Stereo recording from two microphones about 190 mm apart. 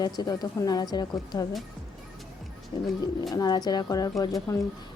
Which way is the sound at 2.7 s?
20° left (ahead or behind).